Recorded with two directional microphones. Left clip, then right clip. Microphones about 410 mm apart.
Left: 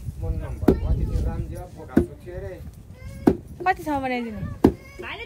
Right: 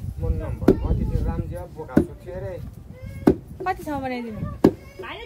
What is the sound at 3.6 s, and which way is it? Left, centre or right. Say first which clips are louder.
Speech: left 3 dB; left.